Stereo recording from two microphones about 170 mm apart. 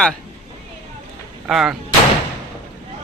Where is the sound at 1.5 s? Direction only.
Centre (ahead or behind).